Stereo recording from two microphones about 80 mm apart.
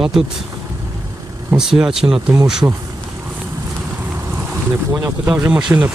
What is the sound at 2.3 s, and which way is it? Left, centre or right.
Speech, right.